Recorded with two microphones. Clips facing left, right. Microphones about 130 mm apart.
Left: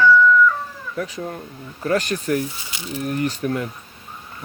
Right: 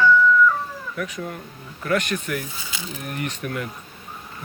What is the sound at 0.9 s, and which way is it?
Speech, 30° left (ahead or behind).